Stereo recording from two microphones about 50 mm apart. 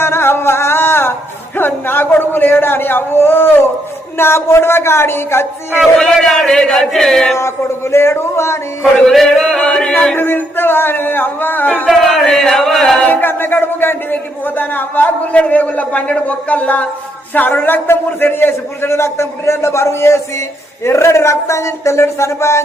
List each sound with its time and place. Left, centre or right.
0.0 s music: left
1.5 s a sound: left
4.2 s a man's voice: left
6.0 s chant: centre
7.3 s speech: left
9.0 s chant: centre
10.2 s speech: left
11.9 s speech: centre
12.2 s chant: centre
13.2 s a man's voice: left